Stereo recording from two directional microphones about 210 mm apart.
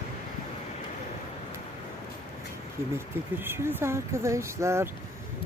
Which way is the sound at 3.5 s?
10° right (ahead or behind).